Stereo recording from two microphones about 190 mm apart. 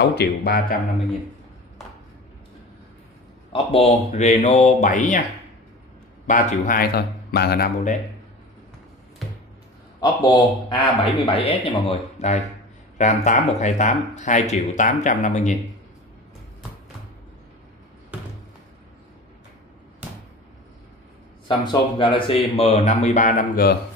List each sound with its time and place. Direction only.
0.0 s a man's voice: 60° left (ahead or behind)
3.5 s speech: 35° left (ahead or behind)
6.2 s a man's voice: 45° left (ahead or behind)
9.9 s speech: 20° left (ahead or behind)
11.3 s speech: 30° left (ahead or behind)
18.1 s a sound: 5° right (ahead or behind)
21.5 s speech: 25° left (ahead or behind); by 23.8 s 50° left (ahead or behind)